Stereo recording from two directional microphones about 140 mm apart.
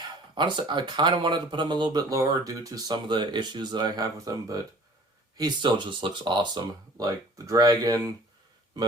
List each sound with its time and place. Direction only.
0.0 s speech: 35° right (ahead or behind)